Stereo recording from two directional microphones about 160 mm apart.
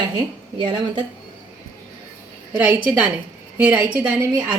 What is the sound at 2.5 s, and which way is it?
A woman's voice, 10° right (ahead or behind).